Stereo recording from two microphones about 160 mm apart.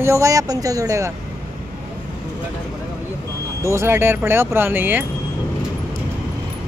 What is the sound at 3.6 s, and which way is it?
Speech, 15° right (ahead or behind).